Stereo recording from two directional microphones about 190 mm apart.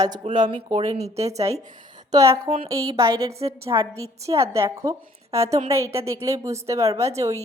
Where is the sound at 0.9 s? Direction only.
35° right (ahead or behind).